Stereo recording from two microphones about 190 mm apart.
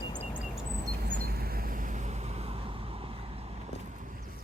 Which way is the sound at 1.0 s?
55° right (ahead or behind).